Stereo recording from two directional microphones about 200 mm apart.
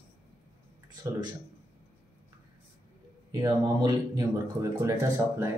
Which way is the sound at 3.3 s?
20° right (ahead or behind).